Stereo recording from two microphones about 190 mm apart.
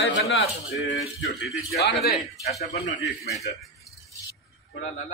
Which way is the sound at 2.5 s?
35° left (ahead or behind).